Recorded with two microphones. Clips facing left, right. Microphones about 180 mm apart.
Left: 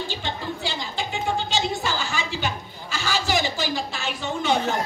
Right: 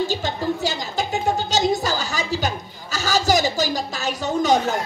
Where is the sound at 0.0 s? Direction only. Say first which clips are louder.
Right 7 dB; 40° right (ahead or behind).